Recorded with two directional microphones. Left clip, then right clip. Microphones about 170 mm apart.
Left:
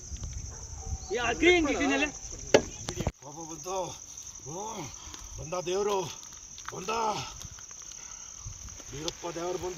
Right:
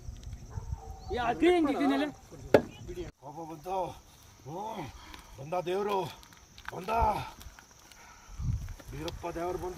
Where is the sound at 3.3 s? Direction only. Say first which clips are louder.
Right 2 dB; 15° right (ahead or behind).